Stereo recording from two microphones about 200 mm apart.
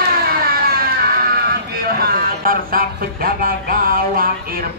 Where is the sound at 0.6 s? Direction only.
50° right (ahead or behind).